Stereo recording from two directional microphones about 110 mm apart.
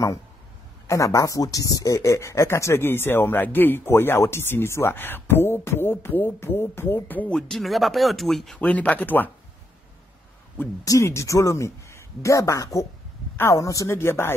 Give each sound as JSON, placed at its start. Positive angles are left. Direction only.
{"t": 0.8, "sound": "speech", "side_deg": 30}
{"t": 8.5, "sound": "speech", "side_deg": 15}
{"t": 10.8, "sound": "speech", "side_deg": 30}